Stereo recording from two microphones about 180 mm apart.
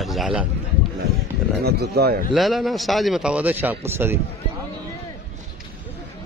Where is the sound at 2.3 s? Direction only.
Centre (ahead or behind).